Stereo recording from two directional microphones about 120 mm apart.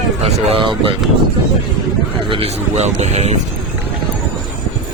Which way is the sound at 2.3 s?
60° right (ahead or behind).